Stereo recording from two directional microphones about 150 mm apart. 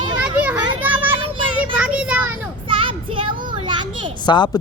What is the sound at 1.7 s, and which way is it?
Child singing, 5° right (ahead or behind).